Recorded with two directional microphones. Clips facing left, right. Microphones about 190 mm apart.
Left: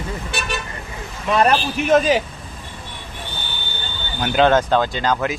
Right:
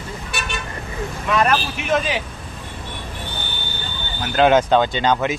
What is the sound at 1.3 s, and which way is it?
Speech, 35° left (ahead or behind).